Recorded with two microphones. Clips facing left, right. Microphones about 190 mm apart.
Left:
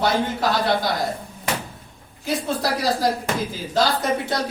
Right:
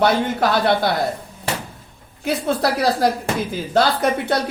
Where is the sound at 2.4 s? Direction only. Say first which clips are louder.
Right 5 dB; 60° right (ahead or behind).